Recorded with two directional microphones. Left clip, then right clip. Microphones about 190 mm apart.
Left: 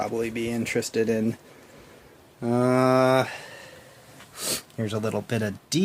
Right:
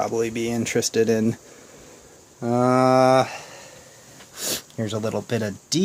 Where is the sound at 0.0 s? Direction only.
15° right (ahead or behind).